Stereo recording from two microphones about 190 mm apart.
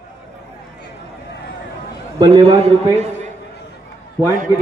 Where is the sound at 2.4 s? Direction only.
35° right (ahead or behind).